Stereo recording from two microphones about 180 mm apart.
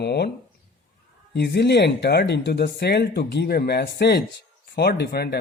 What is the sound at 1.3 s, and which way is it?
Speech, 65° left (ahead or behind).